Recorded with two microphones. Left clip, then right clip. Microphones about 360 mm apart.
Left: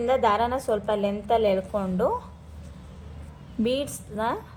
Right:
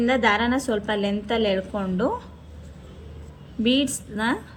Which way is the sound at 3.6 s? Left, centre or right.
Left.